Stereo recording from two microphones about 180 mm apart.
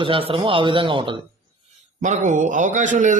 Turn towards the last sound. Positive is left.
turn(degrees=-45)  # may be behind; listen again after turning